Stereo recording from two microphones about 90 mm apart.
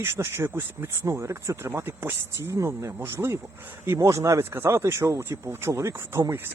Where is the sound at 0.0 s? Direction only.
30° right (ahead or behind).